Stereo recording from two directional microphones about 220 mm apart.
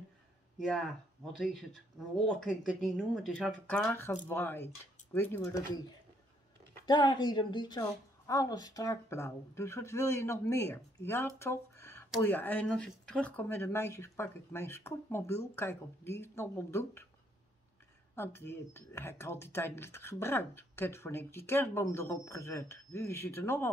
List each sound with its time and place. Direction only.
0.6 s speech: centre (ahead or behind)
6.9 s speech: 20° left (ahead or behind)
18.1 s speech: 10° left (ahead or behind)